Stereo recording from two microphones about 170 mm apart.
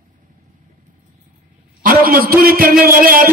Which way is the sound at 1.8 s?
55° right (ahead or behind).